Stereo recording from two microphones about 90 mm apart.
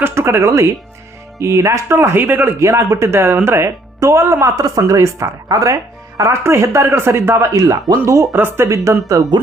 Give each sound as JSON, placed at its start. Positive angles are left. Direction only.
{"t": 0.0, "sound": "speech", "side_deg": -30}